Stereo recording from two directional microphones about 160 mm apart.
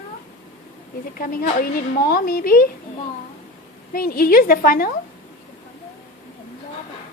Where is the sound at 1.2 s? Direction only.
65° left (ahead or behind).